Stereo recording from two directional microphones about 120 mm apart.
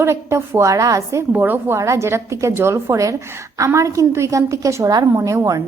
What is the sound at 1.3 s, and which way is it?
A woman's voice, 15° right (ahead or behind).